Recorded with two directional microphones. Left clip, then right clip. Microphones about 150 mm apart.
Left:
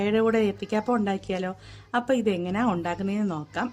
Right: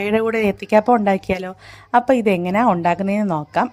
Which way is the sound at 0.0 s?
50° right (ahead or behind).